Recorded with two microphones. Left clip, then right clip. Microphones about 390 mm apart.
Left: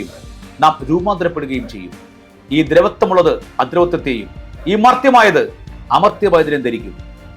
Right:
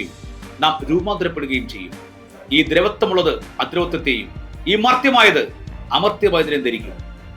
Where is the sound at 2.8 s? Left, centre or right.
Left.